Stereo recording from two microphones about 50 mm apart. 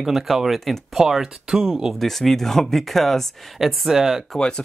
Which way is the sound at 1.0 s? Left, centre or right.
Centre.